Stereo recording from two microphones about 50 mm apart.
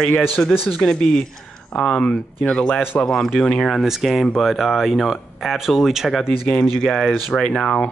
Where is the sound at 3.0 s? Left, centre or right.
Centre.